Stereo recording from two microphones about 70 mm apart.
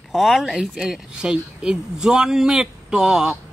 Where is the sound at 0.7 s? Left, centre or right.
Centre.